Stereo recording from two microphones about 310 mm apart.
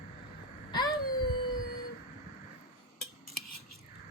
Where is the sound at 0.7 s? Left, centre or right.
Centre.